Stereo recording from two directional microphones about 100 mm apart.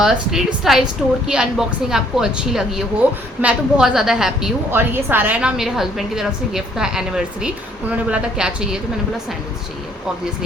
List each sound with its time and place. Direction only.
0.0 s a woman's voice: 5° right (ahead or behind)
3.0 s a woman's voice: 20° right (ahead or behind)
3.4 s a woman's voice: 5° right (ahead or behind)
4.7 s a woman's voice: 20° right (ahead or behind)